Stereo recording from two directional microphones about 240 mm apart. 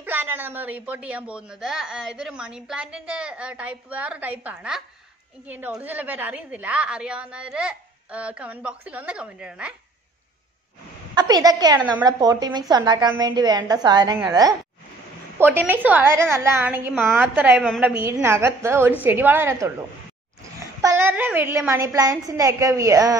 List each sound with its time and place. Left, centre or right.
0.0 s a woman's voice: centre
11.1 s a woman's voice: centre
20.8 s a woman's voice: centre